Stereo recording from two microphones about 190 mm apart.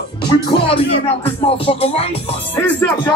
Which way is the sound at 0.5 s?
30° left (ahead or behind).